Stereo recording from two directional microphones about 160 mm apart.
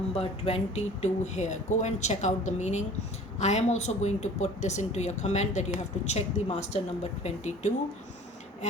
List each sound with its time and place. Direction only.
0.2 s speech: 40° left (ahead or behind)